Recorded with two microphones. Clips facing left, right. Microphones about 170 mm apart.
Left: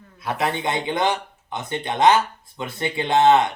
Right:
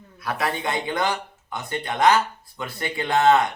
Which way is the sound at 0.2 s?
20° left (ahead or behind).